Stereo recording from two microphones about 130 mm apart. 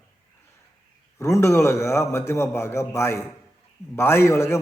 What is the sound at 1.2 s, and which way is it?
A man's voice, 20° left (ahead or behind).